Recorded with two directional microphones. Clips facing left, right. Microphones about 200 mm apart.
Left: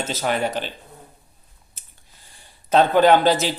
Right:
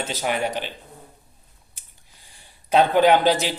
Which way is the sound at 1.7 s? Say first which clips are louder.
Left 1 dB; 15° right (ahead or behind).